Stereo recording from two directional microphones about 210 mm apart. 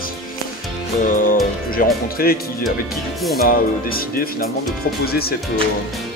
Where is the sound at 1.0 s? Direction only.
40° left (ahead or behind).